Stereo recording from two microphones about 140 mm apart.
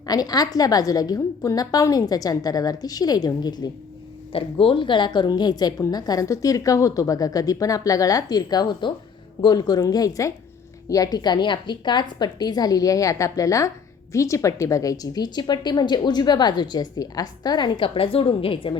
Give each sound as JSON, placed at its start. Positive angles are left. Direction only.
{"t": 0.0, "sound": "a woman's voice", "side_deg": 30}
{"t": 4.3, "sound": "a woman's voice", "side_deg": 40}